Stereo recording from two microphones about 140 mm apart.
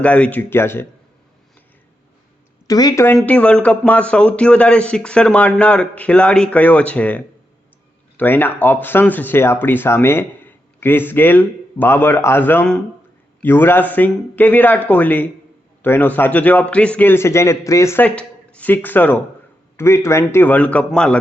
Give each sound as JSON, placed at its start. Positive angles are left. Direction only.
{"t": 0.0, "sound": "speech", "side_deg": 10}
{"t": 2.6, "sound": "speech", "side_deg": 25}
{"t": 3.2, "sound": "speech", "side_deg": 10}